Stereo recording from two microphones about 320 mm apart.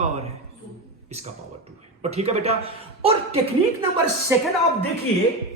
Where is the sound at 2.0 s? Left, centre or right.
Centre.